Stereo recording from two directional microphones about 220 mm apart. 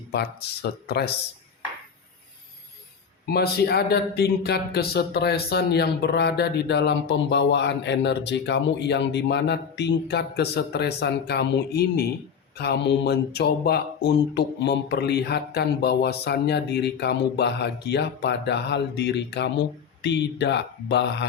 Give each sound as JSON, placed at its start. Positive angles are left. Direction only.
{"t": 0.1, "sound": "speech", "side_deg": 50}
{"t": 3.2, "sound": "speech", "side_deg": 45}